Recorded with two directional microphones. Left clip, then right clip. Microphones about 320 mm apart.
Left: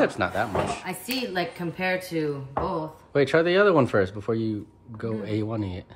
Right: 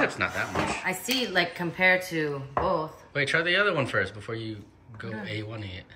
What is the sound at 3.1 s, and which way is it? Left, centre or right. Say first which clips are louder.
Speech: left 4 dB; centre.